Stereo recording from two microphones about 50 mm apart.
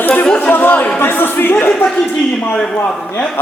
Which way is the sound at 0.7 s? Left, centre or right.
Left.